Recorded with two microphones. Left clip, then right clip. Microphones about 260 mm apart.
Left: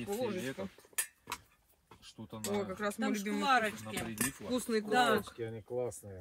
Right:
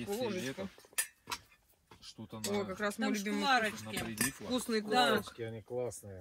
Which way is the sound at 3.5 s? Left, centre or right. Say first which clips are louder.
Left 1 dB; left.